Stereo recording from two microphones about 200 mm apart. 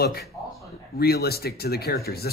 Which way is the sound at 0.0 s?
50° left (ahead or behind).